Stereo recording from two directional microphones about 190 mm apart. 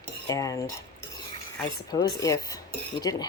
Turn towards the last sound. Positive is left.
turn(degrees=20)  # may be behind; listen again after turning